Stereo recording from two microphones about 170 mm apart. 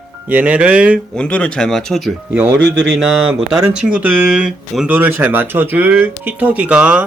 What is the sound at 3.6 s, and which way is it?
Speech, 5° right (ahead or behind).